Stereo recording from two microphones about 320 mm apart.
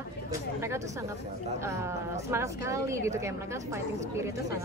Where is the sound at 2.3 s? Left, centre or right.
Centre.